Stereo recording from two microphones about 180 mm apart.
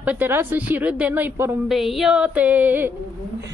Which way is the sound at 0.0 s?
10° right (ahead or behind).